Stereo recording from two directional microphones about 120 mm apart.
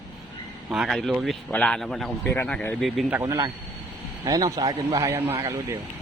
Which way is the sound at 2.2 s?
15° left (ahead or behind).